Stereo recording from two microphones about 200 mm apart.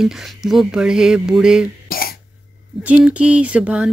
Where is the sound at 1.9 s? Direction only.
50° left (ahead or behind).